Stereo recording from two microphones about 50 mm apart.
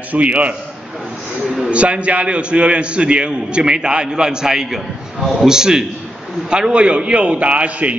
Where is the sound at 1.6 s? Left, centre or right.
Right.